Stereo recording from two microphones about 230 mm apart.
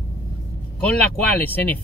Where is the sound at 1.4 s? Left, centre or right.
Centre.